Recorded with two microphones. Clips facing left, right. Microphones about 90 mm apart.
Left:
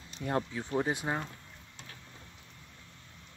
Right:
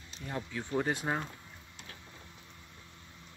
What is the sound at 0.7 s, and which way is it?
Speech, 5° left (ahead or behind).